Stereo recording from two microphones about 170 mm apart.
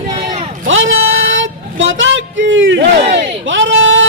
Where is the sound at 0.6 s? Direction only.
90° right.